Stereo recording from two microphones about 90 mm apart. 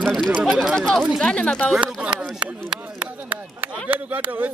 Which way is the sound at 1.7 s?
10° right (ahead or behind).